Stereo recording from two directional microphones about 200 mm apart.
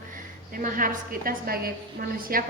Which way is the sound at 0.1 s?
45° right (ahead or behind).